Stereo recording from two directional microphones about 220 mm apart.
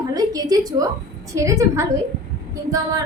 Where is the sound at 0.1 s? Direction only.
15° right (ahead or behind).